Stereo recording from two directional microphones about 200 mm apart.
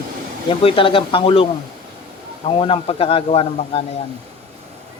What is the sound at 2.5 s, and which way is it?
A man's voice, 25° left (ahead or behind).